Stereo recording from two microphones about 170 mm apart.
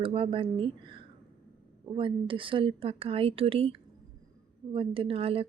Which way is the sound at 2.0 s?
30° right (ahead or behind).